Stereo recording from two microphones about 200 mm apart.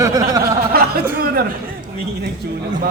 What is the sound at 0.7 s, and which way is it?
Speech, 50° right (ahead or behind).